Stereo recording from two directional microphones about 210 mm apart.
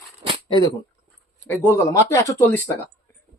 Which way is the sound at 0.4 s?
20° left (ahead or behind).